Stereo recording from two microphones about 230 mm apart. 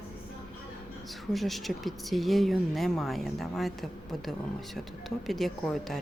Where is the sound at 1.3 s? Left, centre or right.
Centre.